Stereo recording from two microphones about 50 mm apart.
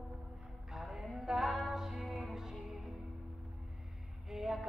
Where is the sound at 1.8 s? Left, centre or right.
Centre.